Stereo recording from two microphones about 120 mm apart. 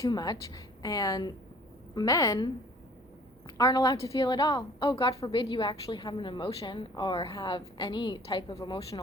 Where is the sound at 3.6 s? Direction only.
35° left (ahead or behind).